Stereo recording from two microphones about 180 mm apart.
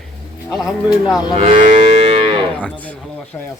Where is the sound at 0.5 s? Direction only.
Centre (ahead or behind).